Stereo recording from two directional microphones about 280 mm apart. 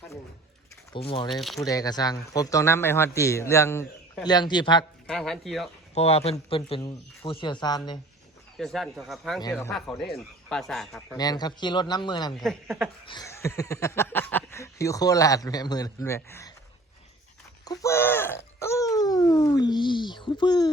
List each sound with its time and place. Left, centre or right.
0.9 s speech: centre
1.3 s speech: centre
1.5 s speech: centre
5.0 s speech: centre
5.9 s speech: left
8.5 s speech: centre
9.4 s speech: centre
11.2 s speech: centre
12.4 s speech: centre
13.1 s speech: centre
17.7 s speech: centre